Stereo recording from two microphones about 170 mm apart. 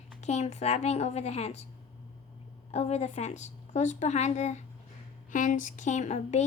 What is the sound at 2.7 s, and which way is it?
A woman's voice, 40° left (ahead or behind).